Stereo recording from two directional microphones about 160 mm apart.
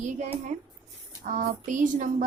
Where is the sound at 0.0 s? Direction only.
45° right (ahead or behind).